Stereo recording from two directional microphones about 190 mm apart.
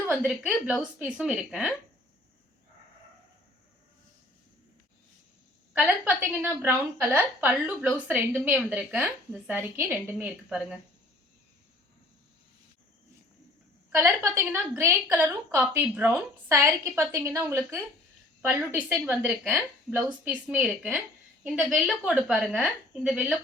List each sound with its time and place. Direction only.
0.1 s a woman's voice: 5° right (ahead or behind)
5.7 s a woman's voice: 10° right (ahead or behind)
13.9 s a woman's voice: 15° right (ahead or behind)